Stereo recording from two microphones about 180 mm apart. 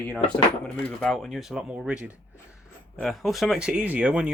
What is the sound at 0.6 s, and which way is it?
Speech, 5° left (ahead or behind).